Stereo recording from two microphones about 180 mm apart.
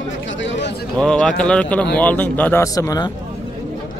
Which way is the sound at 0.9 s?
5° left (ahead or behind).